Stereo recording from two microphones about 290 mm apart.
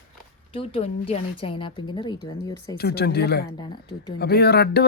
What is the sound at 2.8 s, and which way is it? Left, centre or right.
Speech, left.